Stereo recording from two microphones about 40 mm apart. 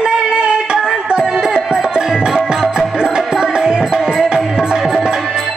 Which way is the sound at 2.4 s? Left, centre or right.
Centre.